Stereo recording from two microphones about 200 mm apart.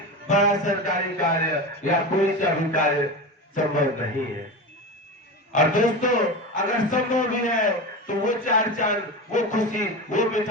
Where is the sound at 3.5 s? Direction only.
40° left (ahead or behind).